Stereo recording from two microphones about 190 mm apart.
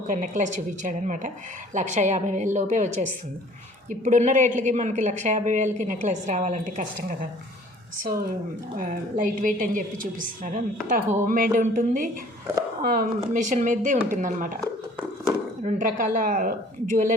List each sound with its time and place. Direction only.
0.1 s a woman's voice: 40° right (ahead or behind)
8.7 s a woman's voice: 45° right (ahead or behind)
15.6 s a woman's voice: 40° right (ahead or behind)